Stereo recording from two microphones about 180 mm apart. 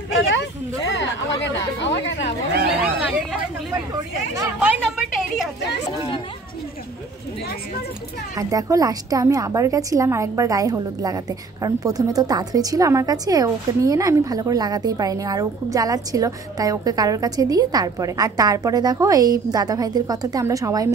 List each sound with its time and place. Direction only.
0.9 s chatter: 75° left (ahead or behind)
2.8 s hubbub: centre (ahead or behind)
4.6 s a woman's voice: 5° right (ahead or behind)
8.4 s a woman's voice: 20° right (ahead or behind)